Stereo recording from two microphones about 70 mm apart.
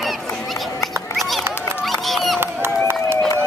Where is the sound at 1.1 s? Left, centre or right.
Centre.